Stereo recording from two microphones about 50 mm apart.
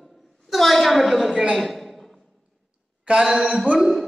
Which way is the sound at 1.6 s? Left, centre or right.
Centre.